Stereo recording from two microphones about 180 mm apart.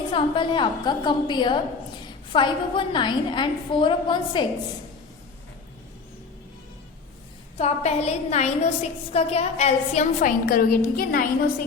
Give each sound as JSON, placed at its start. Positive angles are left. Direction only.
{"t": 0.1, "sound": "a woman's voice", "side_deg": 30}
{"t": 7.6, "sound": "a woman's voice", "side_deg": 35}